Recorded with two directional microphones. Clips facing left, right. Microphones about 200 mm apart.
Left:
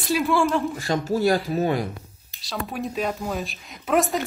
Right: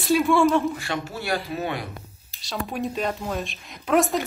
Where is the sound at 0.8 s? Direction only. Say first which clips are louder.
Left 7 dB; 40° left (ahead or behind).